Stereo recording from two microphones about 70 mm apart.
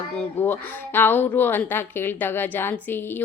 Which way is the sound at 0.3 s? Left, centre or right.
Left.